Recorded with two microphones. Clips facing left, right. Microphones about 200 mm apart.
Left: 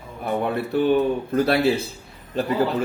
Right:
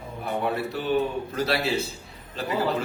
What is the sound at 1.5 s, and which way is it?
Speech, 55° left (ahead or behind).